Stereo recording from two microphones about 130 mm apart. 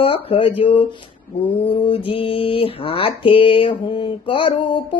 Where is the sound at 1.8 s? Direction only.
40° left (ahead or behind).